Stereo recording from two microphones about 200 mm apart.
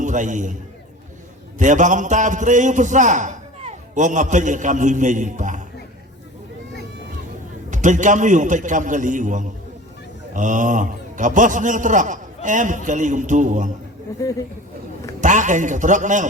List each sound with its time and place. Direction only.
0.0 s a man's voice: 40° right (ahead or behind)
1.5 s a man's voice: 40° right (ahead or behind)
7.7 s a man's voice: 40° right (ahead or behind)
14.2 s speech: 15° left (ahead or behind)
15.2 s a man's voice: 40° right (ahead or behind)